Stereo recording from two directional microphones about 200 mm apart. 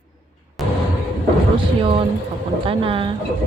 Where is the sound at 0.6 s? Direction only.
Centre (ahead or behind).